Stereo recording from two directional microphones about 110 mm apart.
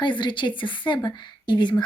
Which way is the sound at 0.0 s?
45° left (ahead or behind).